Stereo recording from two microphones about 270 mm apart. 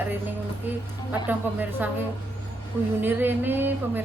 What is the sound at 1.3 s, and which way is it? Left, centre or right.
Speech, centre.